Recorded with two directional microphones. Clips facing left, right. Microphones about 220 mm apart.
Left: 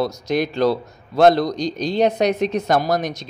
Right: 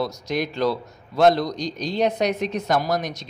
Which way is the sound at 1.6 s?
25° left (ahead or behind).